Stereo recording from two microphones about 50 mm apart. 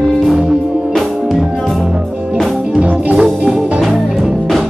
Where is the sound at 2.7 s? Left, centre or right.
Right.